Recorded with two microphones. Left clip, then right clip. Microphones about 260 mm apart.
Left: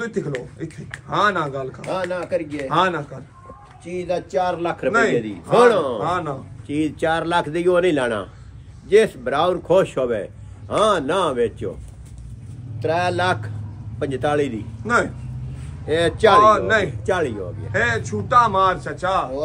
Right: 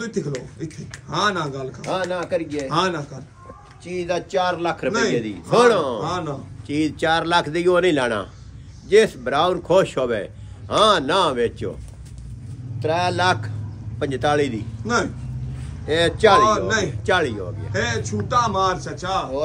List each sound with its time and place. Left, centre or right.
0.0 s a man's voice: centre
2.0 s speech: right
2.6 s a man's voice: centre
12.7 s a man's voice: centre